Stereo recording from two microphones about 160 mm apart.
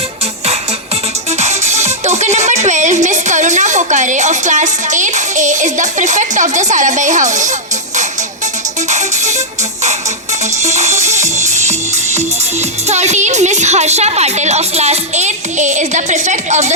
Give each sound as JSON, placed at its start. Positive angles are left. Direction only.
{"t": 1.4, "sound": "music", "side_deg": -45}
{"t": 8.9, "sound": "music", "side_deg": -45}
{"t": 10.6, "sound": "a woman's voice", "side_deg": -45}